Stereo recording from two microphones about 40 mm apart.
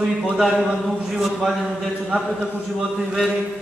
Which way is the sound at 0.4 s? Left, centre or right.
Centre.